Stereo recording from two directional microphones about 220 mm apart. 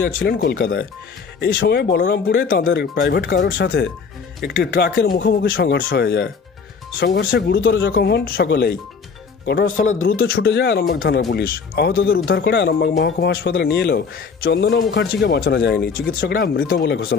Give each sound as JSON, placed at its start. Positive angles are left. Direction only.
{"t": 0.0, "sound": "speech", "side_deg": 45}
{"t": 10.0, "sound": "speech", "side_deg": 45}